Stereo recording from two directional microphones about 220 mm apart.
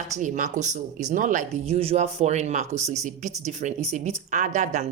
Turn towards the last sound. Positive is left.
turn(degrees=-30)  # may be behind; listen again after turning